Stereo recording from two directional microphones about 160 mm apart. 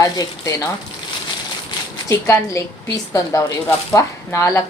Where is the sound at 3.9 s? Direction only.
20° left (ahead or behind).